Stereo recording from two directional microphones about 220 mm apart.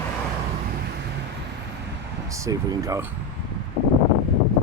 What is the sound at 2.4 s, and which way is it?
Speech, 15° right (ahead or behind).